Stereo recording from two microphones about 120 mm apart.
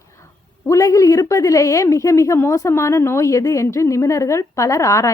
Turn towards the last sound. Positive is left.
turn(degrees=25)  # may be behind; listen again after turning